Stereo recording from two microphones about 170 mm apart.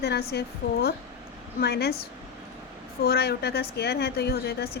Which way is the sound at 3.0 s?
70° left (ahead or behind).